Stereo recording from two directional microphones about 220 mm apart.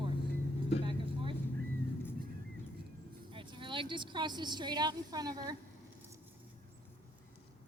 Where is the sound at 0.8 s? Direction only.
25° right (ahead or behind).